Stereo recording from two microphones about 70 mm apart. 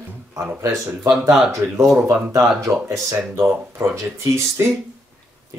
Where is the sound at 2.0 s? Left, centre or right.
Right.